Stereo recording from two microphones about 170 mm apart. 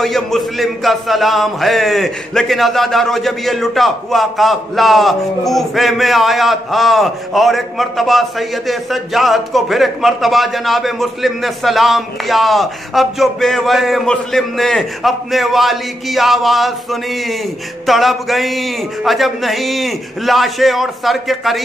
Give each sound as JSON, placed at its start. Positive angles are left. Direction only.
{"t": 0.0, "sound": "a man's voice", "side_deg": 0}